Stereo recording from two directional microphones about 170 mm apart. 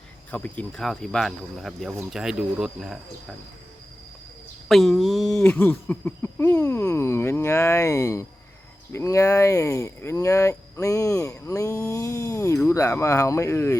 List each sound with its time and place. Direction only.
0.3 s speech: 10° left (ahead or behind)
4.7 s speech: centre (ahead or behind)